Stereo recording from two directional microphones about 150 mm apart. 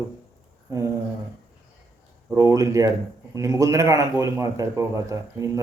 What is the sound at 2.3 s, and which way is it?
A man's voice, 20° right (ahead or behind).